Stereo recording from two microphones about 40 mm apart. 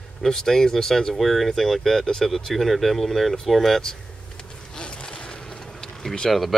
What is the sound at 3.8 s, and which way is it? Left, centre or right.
Vehicle, centre.